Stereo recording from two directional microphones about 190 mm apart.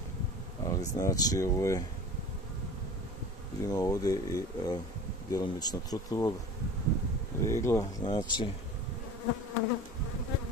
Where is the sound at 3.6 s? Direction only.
20° left (ahead or behind).